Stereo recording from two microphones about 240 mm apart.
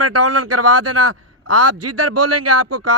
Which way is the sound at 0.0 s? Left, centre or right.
Right.